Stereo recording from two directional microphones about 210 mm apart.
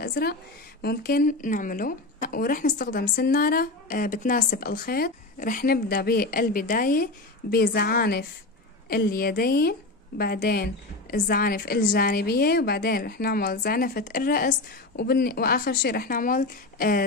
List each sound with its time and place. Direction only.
0.0 s a woman's voice: 45° left (ahead or behind)